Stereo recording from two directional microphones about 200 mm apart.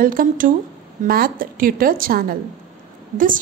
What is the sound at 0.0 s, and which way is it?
A woman's voice, 45° right (ahead or behind).